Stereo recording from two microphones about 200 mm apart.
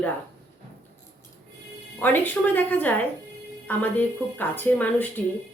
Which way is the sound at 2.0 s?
10° left (ahead or behind).